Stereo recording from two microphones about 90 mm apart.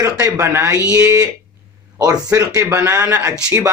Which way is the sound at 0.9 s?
40° right (ahead or behind).